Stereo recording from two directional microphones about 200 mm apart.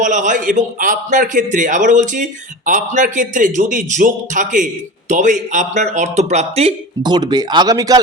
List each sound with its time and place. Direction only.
0.0 s a man's voice: 40° right (ahead or behind); by 8.0 s 20° right (ahead or behind)